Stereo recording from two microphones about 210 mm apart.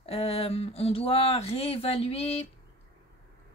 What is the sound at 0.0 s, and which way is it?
Speech, 25° left (ahead or behind).